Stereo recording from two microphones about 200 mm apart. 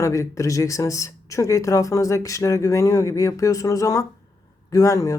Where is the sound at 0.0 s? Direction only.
15° left (ahead or behind).